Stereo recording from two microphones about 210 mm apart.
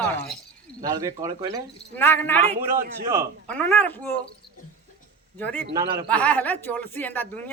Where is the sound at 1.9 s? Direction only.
10° left (ahead or behind).